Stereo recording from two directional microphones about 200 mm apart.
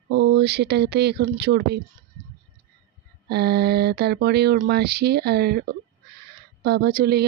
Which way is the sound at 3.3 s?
55° right (ahead or behind).